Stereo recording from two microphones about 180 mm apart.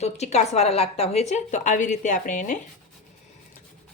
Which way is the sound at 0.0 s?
40° left (ahead or behind).